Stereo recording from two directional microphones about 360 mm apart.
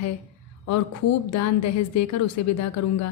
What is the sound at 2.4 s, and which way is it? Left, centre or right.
Speech, left.